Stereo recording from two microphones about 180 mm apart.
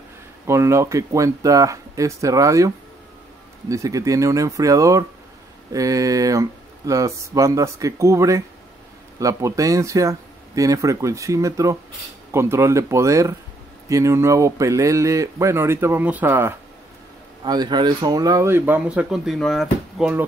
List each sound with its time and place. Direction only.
0.5 s speech: 15° right (ahead or behind)
17.4 s speech: 25° right (ahead or behind); by 20.2 s 5° right (ahead or behind)